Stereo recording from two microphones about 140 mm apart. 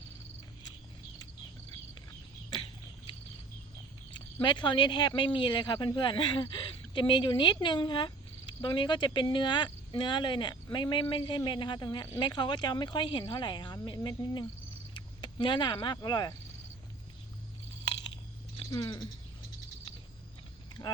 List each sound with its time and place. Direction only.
4.1 s speech: 35° left (ahead or behind)
18.7 s speech: 25° left (ahead or behind)
20.8 s speech: 25° left (ahead or behind)